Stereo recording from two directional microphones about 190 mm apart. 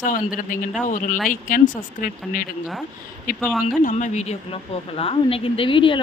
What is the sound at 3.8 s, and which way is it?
Speech, 40° left (ahead or behind).